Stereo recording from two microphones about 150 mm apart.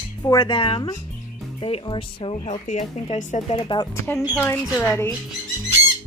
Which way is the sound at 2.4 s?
55° left (ahead or behind).